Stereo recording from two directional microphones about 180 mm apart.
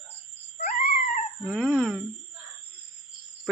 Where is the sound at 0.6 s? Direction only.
50° left (ahead or behind).